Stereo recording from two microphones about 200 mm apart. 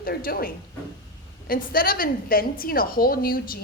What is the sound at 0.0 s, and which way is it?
A woman's voice, 50° left (ahead or behind).